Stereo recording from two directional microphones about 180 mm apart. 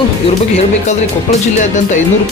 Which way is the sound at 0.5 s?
40° left (ahead or behind).